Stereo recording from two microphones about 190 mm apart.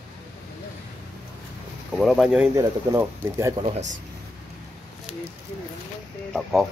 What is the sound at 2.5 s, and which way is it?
Speech, 15° right (ahead or behind).